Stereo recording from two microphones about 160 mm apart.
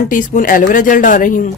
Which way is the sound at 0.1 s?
55° left (ahead or behind).